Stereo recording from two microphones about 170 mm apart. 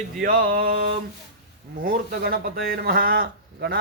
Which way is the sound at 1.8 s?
60° right (ahead or behind).